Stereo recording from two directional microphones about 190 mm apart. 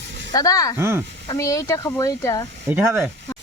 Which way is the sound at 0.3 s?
20° left (ahead or behind).